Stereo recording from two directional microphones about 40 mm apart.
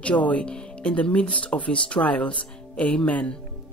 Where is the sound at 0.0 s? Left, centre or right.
Left.